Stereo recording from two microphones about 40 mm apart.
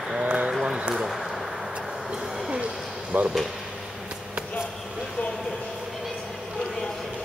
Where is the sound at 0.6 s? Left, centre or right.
Right.